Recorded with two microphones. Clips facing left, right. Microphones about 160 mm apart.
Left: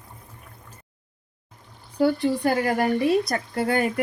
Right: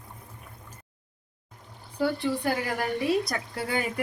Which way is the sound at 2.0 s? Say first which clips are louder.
Left 6 dB; 50° left (ahead or behind).